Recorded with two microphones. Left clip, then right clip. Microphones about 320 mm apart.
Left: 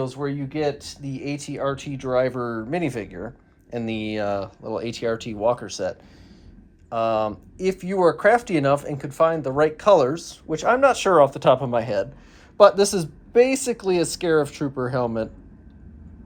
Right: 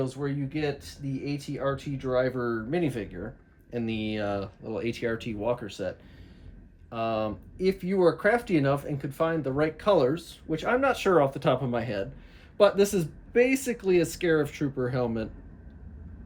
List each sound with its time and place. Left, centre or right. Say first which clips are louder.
0.0 s speech: left 4 dB; centre
6.9 s speech: left 7 dB; centre